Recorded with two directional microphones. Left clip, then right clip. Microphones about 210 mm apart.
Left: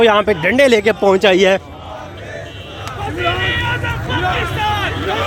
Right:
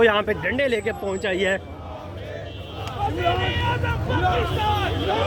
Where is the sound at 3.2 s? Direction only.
55° left (ahead or behind).